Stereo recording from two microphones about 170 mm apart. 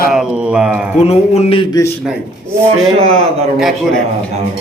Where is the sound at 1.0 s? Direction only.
35° left (ahead or behind).